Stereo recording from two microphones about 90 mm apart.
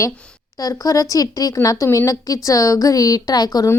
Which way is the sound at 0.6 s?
40° left (ahead or behind).